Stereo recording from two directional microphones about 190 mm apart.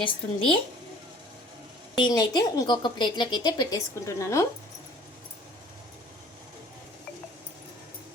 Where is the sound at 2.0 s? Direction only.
20° left (ahead or behind).